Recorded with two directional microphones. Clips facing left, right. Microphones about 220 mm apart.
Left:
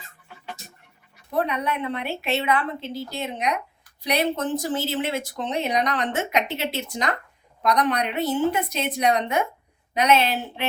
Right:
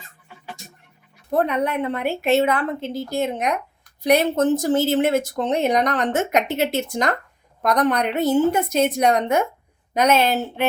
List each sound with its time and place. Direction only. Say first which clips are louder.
0.3 s music: even; 5° right (ahead or behind)
1.3 s speech: right 4 dB; 50° right (ahead or behind)